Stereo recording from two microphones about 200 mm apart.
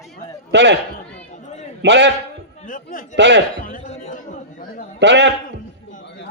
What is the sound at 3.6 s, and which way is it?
Chatter, 40° left (ahead or behind).